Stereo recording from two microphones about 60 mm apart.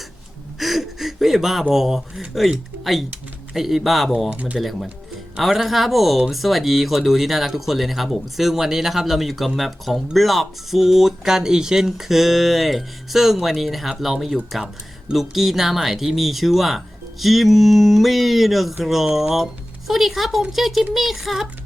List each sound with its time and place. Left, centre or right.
0.6 s gasp: centre
1.7 s speech: centre
4.3 s speech: right
4.5 s speech: centre